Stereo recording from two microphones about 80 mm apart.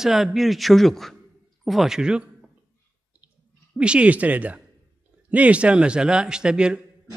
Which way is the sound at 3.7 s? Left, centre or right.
Centre.